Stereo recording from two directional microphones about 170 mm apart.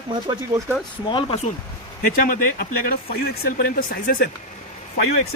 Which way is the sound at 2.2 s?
55° left (ahead or behind).